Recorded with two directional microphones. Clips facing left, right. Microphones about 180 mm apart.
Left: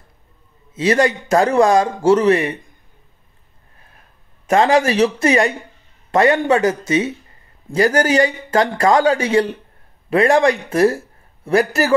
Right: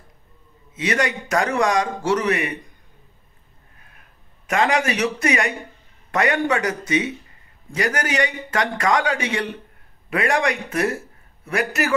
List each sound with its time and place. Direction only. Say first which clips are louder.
0.7 s speech: left 7 dB; 30° left (ahead or behind)
4.5 s speech: left 6 dB; 35° left (ahead or behind)